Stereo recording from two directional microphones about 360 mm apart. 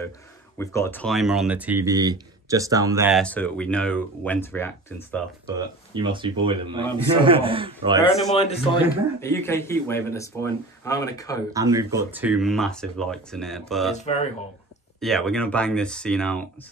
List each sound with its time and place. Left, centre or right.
0.6 s speech: centre
5.5 s a man's voice: centre
8.4 s speech: centre
11.5 s speech: centre
13.9 s speech: centre
15.0 s speech: centre